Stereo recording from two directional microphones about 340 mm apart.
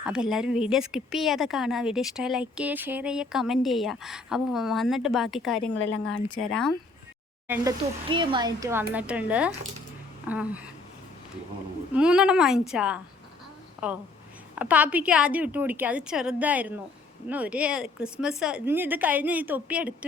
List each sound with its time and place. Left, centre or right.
0.0 s speech: centre
5.7 s a woman's voice: left
6.1 s speech: centre
11.9 s a woman's voice: centre